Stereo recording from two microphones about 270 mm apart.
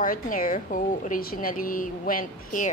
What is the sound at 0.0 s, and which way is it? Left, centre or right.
A woman's voice, left.